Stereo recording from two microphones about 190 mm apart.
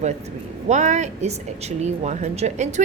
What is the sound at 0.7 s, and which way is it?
A woman's voice, 40° right (ahead or behind).